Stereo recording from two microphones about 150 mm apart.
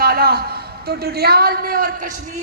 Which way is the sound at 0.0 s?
90° right.